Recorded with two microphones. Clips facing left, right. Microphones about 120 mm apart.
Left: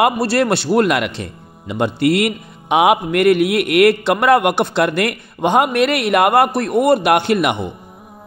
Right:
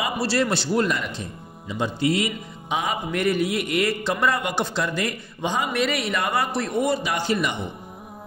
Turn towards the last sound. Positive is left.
turn(degrees=65)  # may be behind; listen again after turning